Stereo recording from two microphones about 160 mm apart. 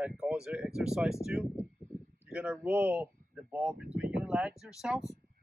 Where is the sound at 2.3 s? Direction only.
10° right (ahead or behind).